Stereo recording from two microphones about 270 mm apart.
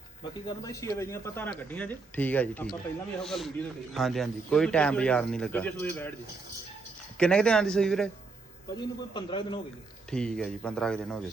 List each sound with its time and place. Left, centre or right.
0.4 s speech: centre
7.2 s speech: centre
8.7 s speech: centre
10.1 s speech: centre